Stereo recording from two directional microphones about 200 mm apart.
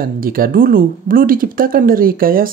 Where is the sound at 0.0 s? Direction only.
45° right (ahead or behind).